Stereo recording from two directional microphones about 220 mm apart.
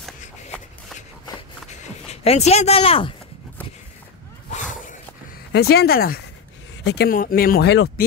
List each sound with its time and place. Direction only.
2.2 s speech: 30° left (ahead or behind)
4.5 s a sound: 35° left (ahead or behind)
5.5 s speech: 45° left (ahead or behind)